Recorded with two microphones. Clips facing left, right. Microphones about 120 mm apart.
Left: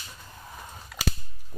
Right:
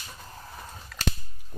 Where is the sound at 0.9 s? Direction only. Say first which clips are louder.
Left 3 dB; 10° left (ahead or behind).